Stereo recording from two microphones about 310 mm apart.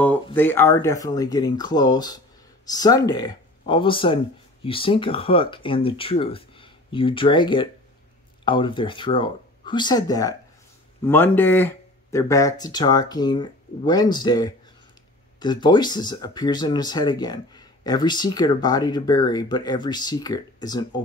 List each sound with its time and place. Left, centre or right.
0.3 s speech: centre